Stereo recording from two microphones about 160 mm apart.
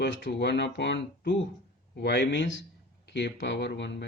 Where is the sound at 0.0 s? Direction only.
90° left.